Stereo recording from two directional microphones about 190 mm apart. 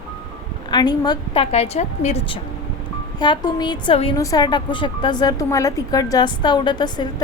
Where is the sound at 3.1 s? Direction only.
25° left (ahead or behind).